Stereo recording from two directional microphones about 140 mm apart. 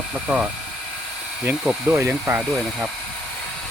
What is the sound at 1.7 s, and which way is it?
Speech, 10° right (ahead or behind).